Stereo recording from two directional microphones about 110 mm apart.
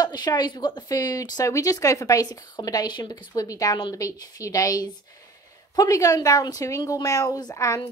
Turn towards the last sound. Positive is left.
turn(degrees=30)  # may be behind; listen again after turning